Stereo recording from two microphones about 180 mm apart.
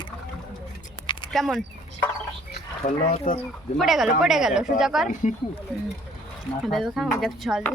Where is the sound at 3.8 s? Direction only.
Centre (ahead or behind).